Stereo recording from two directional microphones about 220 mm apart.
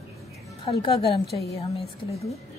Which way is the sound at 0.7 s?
25° left (ahead or behind).